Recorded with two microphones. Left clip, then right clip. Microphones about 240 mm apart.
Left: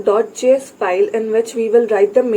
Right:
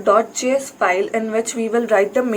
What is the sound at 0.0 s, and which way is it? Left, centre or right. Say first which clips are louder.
A woman's voice: left 1 dB; centre.